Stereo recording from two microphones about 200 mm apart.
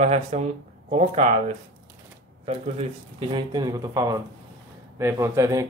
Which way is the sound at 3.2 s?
20° right (ahead or behind).